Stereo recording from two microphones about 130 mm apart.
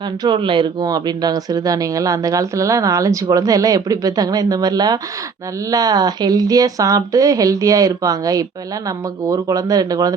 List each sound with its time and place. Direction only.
0.2 s speech: 35° right (ahead or behind)